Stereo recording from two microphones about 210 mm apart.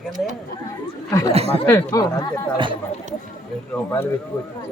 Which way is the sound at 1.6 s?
15° left (ahead or behind).